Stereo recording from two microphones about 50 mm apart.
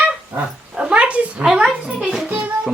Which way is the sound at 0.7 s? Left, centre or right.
Right.